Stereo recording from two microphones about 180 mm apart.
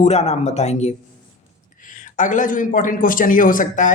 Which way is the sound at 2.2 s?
45° left (ahead or behind).